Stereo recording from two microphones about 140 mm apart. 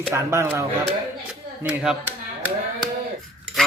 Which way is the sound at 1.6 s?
5° right (ahead or behind).